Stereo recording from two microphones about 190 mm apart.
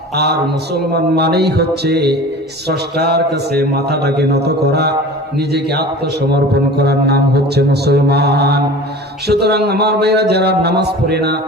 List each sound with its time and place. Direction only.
0.2 s a man's voice: 60° right (ahead or behind)
6.3 s a man's voice: 60° right (ahead or behind)